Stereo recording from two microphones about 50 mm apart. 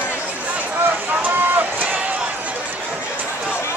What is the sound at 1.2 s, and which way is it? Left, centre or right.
Run, right.